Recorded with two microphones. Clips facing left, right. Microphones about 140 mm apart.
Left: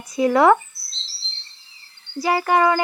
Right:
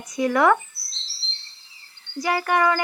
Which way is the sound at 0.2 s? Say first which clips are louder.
Left 4 dB; 25° left (ahead or behind).